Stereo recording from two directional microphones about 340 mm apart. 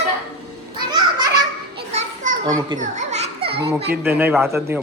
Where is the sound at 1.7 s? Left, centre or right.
Right.